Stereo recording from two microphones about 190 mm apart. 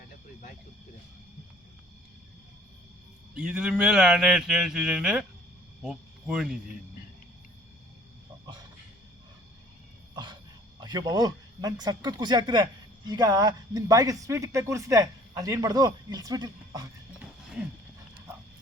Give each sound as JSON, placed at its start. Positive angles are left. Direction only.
{"t": 3.3, "sound": "speech", "side_deg": -5}
{"t": 10.8, "sound": "speech", "side_deg": -20}